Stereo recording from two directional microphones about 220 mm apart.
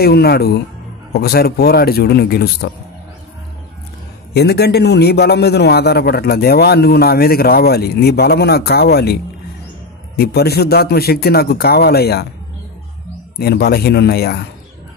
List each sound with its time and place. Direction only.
0.0 s a man's voice: 45° left (ahead or behind)
4.3 s a man's voice: 50° left (ahead or behind)
13.4 s a man's voice: 45° left (ahead or behind)